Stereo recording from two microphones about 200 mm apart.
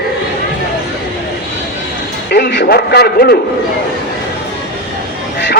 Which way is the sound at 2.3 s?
55° left (ahead or behind).